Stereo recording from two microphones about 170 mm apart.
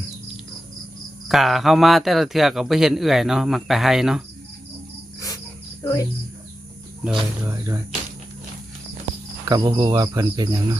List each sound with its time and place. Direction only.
1.3 s speech: centre (ahead or behind)
5.8 s speech: 15° left (ahead or behind)
7.0 s speech: centre (ahead or behind)
7.4 s speech: 15° right (ahead or behind)
9.5 s speech: 25° right (ahead or behind)